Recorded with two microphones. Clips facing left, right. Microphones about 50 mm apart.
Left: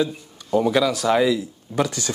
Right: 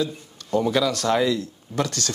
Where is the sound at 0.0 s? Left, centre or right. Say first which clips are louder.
Left 3 dB; centre.